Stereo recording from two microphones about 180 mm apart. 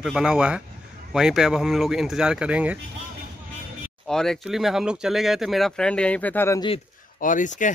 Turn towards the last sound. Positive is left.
turn(degrees=45)  # may be behind; listen again after turning